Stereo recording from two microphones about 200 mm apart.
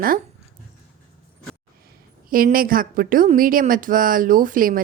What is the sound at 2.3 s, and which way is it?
A woman's voice, 45° right (ahead or behind).